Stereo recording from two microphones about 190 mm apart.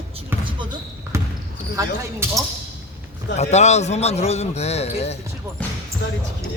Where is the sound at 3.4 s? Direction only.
35° left (ahead or behind).